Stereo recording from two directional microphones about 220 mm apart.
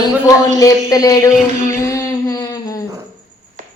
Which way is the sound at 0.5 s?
15° left (ahead or behind).